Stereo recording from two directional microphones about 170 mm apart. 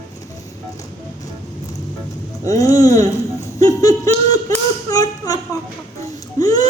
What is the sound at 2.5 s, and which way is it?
Speech, 20° left (ahead or behind).